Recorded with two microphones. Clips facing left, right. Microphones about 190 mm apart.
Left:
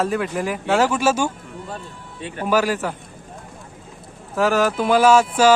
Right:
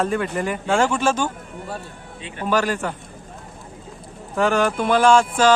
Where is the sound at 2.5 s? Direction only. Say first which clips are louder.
Left 1 dB; 5° left (ahead or behind).